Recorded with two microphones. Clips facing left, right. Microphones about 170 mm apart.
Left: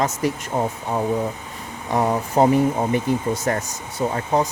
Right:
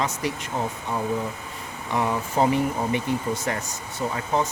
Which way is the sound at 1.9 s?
40° left (ahead or behind).